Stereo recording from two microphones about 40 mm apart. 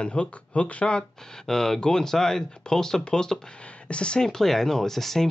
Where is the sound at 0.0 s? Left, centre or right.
Left.